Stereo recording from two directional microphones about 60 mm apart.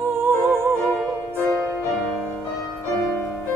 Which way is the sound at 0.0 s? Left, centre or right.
Right.